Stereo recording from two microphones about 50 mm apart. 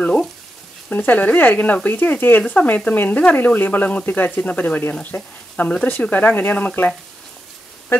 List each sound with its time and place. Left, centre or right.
0.0 s frying: left
0.8 s speech: left